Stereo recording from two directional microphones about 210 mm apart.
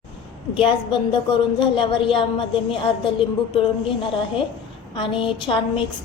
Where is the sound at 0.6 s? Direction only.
25° left (ahead or behind).